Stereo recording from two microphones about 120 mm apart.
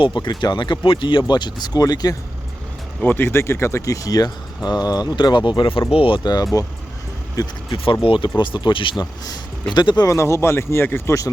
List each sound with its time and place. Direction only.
0.0 s speech: 40° left (ahead or behind)
3.0 s speech: 15° left (ahead or behind)
8.0 s speech: 45° left (ahead or behind); by 11.3 s 25° left (ahead or behind)